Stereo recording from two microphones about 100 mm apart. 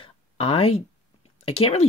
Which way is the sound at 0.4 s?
75° left (ahead or behind).